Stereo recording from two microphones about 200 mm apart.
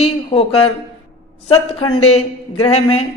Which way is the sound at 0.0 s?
30° left (ahead or behind).